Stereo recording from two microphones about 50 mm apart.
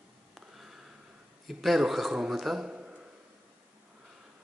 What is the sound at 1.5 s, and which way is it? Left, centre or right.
Speech, centre.